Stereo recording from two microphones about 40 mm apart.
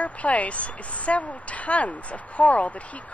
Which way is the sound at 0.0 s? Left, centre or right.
Left.